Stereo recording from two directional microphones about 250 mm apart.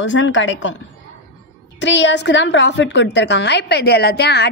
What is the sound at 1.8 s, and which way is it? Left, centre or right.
A woman's voice, left.